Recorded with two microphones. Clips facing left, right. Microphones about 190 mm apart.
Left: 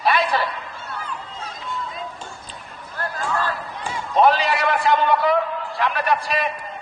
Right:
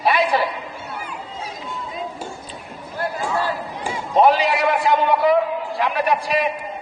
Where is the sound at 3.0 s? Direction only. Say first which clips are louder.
Right 2 dB; 10° right (ahead or behind).